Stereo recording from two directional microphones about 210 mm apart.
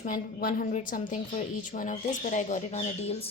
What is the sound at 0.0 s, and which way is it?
A woman's voice, 40° left (ahead or behind).